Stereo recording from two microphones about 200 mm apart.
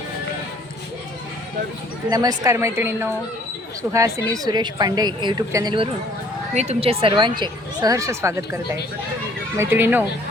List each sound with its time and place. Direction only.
2.0 s a woman's voice: 15° right (ahead or behind)
4.3 s a woman's voice: 20° right (ahead or behind)
6.5 s a woman's voice: 35° right (ahead or behind); by 10.0 s 10° right (ahead or behind)